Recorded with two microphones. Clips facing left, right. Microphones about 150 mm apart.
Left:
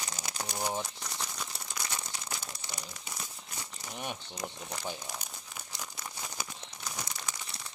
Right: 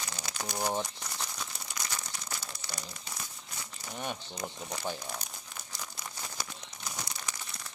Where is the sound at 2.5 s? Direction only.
25° left (ahead or behind).